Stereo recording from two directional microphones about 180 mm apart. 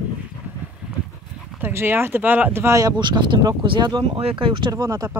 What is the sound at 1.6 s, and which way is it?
Speech, 10° right (ahead or behind).